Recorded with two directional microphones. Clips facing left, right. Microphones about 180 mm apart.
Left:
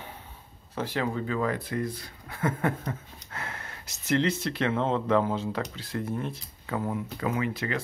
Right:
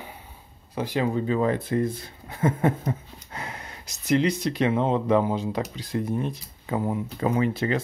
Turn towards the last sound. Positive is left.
turn(degrees=-30)  # may be behind; listen again after turning